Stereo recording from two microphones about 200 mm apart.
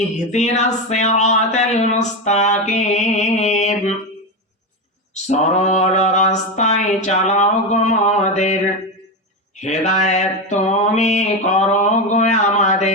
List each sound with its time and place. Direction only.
0.3 s speech: 35° left (ahead or behind)
5.1 s speech: 35° left (ahead or behind)
9.6 s mantra: 35° left (ahead or behind)